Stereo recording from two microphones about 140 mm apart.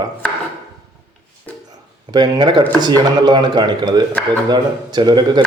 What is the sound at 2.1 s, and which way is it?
A man's voice, 30° right (ahead or behind).